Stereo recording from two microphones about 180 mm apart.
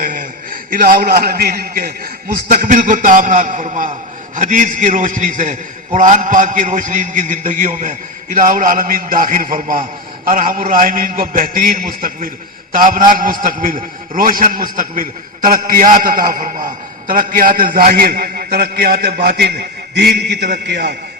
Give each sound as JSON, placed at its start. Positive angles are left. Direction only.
{"t": 0.0, "sound": "a man's voice", "side_deg": -50}